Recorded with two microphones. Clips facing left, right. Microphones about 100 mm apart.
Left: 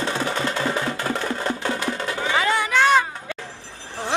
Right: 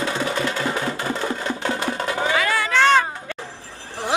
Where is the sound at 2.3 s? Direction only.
20° left (ahead or behind).